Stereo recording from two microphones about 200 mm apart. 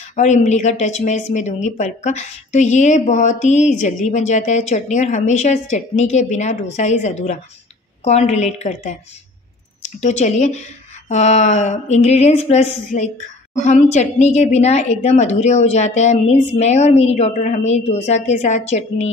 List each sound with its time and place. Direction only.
0.1 s a woman's voice: 35° left (ahead or behind)